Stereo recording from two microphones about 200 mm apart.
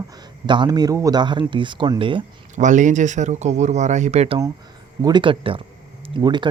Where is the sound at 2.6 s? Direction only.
40° right (ahead or behind).